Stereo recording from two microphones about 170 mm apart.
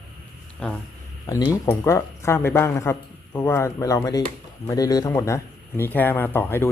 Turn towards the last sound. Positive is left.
turn(degrees=15)  # may be behind; listen again after turning